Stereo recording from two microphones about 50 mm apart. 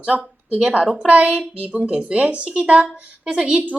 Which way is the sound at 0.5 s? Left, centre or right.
Right.